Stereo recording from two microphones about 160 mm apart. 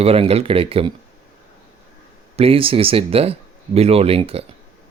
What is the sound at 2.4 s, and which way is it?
Speech, 35° right (ahead or behind).